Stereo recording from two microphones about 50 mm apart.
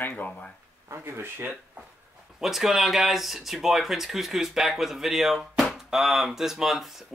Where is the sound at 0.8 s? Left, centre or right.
Right.